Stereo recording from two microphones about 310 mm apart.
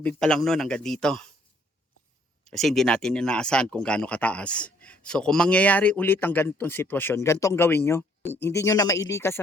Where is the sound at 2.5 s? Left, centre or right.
Centre.